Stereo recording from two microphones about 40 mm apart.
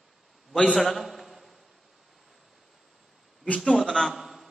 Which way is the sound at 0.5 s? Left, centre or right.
Left.